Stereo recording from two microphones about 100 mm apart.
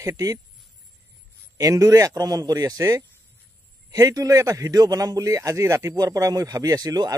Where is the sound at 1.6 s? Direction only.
35° right (ahead or behind).